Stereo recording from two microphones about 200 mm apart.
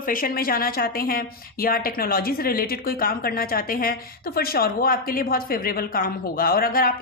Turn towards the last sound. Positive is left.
turn(degrees=45)  # may be behind; listen again after turning